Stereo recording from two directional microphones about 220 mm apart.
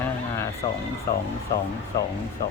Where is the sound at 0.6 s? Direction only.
15° left (ahead or behind).